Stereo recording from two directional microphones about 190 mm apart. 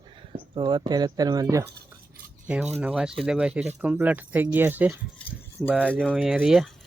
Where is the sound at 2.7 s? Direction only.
5° right (ahead or behind).